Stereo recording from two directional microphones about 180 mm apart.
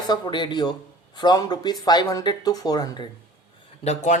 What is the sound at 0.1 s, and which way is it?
Speech, 25° left (ahead or behind).